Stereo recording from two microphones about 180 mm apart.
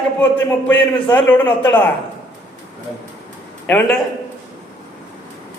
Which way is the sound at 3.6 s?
5° left (ahead or behind).